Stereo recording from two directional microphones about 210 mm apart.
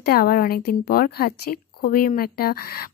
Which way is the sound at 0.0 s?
45° left (ahead or behind).